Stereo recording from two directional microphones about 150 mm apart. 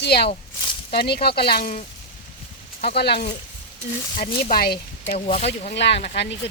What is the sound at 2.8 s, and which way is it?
Speech, 90° left.